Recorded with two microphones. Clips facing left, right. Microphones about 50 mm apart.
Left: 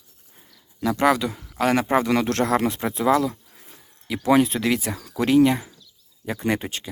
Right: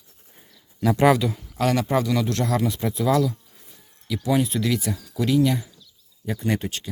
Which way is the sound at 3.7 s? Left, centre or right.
Left.